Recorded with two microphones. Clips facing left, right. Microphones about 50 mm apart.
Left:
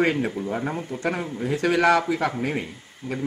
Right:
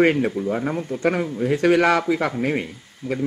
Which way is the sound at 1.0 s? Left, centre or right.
Right.